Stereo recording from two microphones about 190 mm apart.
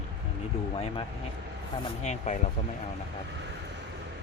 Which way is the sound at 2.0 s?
35° left (ahead or behind).